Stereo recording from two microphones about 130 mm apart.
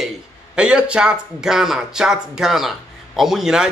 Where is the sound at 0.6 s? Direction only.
10° right (ahead or behind).